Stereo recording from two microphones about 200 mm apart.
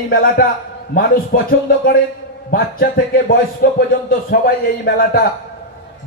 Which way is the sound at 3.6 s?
50° left (ahead or behind).